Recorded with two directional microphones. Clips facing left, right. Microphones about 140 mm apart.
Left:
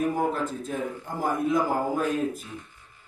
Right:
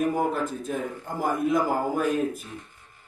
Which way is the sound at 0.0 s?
10° right (ahead or behind).